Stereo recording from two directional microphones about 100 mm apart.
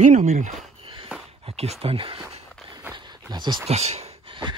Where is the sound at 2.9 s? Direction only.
50° right (ahead or behind).